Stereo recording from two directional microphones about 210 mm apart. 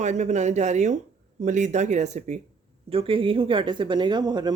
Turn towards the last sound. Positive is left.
turn(degrees=-20)  # may be behind; listen again after turning